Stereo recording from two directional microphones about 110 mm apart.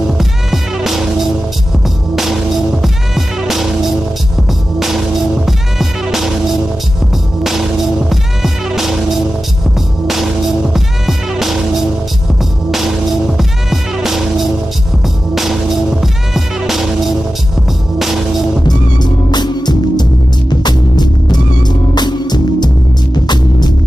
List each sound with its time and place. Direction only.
0.2 s music: centre (ahead or behind)
2.8 s music: centre (ahead or behind)
8.1 s music: centre (ahead or behind)
10.7 s music: centre (ahead or behind)
13.4 s music: centre (ahead or behind)
16.0 s music: centre (ahead or behind)
18.7 s music: 40° left (ahead or behind)